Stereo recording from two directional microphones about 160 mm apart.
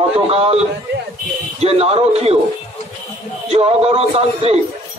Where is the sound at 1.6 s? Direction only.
40° right (ahead or behind).